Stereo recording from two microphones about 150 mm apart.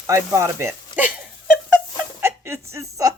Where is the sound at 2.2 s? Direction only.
15° right (ahead or behind).